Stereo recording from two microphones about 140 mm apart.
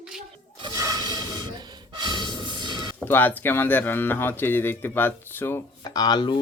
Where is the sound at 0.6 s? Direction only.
25° right (ahead or behind).